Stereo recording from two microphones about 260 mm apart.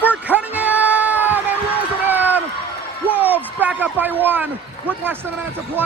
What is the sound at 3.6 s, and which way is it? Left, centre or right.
Speech, centre.